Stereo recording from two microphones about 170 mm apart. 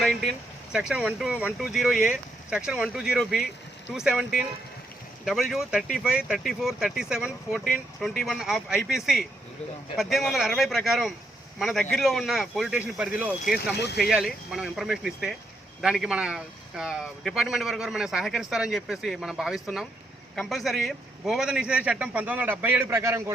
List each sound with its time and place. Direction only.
0.0 s a sound: centre (ahead or behind)
0.7 s speech: centre (ahead or behind)
13.7 s speech: 80° left
14.0 s a man's voice: centre (ahead or behind)